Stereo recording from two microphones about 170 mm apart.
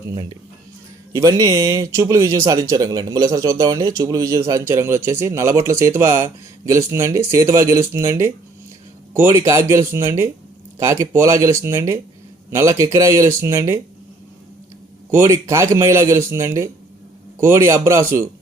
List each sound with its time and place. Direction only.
0.1 s speech: 25° right (ahead or behind)
15.1 s speech: 15° right (ahead or behind)